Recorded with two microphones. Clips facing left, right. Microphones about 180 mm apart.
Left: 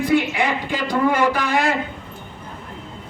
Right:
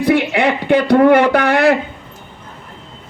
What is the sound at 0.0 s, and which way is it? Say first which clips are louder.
Speech: right 5 dB; 70° right (ahead or behind).